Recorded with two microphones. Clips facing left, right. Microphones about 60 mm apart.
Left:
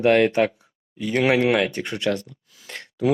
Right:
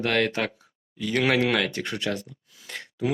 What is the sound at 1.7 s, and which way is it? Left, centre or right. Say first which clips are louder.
Speech: left 2 dB; left.